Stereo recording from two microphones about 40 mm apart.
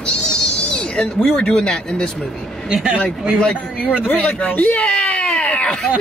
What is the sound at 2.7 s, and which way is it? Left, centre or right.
Speech, right.